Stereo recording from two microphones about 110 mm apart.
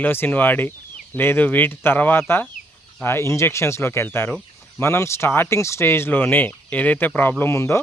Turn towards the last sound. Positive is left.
turn(degrees=25)  # may be behind; listen again after turning